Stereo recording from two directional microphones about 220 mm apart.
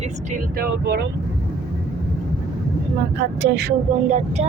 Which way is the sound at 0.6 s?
45° right (ahead or behind).